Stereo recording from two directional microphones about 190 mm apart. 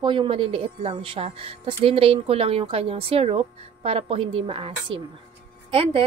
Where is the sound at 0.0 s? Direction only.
25° right (ahead or behind).